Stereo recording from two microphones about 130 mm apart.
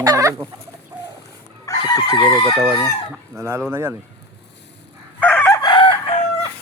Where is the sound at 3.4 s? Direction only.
20° right (ahead or behind).